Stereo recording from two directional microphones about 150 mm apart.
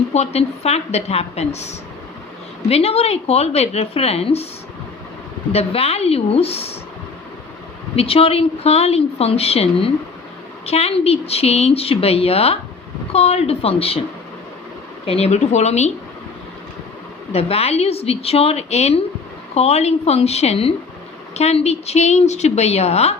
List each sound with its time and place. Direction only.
0.1 s a woman's voice: 45° left (ahead or behind)
5.5 s a woman's voice: 45° left (ahead or behind)
7.9 s a woman's voice: 40° left (ahead or behind)
15.0 s a woman's voice: 40° left (ahead or behind)
17.3 s a woman's voice: 45° left (ahead or behind)